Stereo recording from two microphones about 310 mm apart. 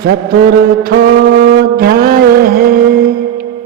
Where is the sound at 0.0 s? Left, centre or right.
Right.